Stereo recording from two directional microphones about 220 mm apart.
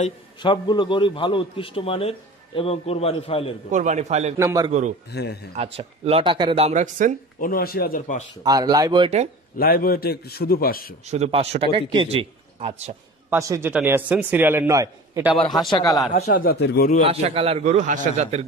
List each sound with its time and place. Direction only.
0.0 s a man's voice: 20° left (ahead or behind)
3.7 s a man's voice: 30° right (ahead or behind)
4.4 s a man's voice: 15° right (ahead or behind)
5.1 s a man's voice: 50° left (ahead or behind)
5.6 s a man's voice: 30° right (ahead or behind)
7.3 s speech: 40° left (ahead or behind)
8.5 s a man's voice: 15° right (ahead or behind)
9.6 s a man's voice: 45° left (ahead or behind)
11.1 s a man's voice: 30° right (ahead or behind)
13.3 s a man's voice: 10° right (ahead or behind)
15.7 s speech: 15° left (ahead or behind)
16.3 s a man's voice: 45° left (ahead or behind)
17.0 s a man's voice: 25° right (ahead or behind)